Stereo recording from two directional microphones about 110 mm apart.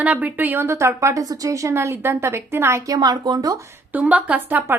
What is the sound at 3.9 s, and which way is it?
Speech, 15° right (ahead or behind).